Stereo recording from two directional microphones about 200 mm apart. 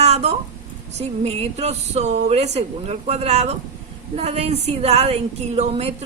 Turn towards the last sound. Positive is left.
turn(degrees=-30)  # may be behind; listen again after turning